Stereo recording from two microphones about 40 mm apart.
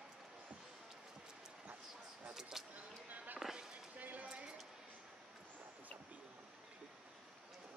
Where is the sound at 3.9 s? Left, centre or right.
Right.